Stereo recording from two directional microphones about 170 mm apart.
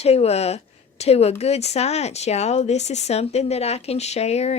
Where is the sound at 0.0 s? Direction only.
35° left (ahead or behind).